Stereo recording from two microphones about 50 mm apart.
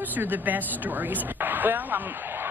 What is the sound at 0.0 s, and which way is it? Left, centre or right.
Speech, right.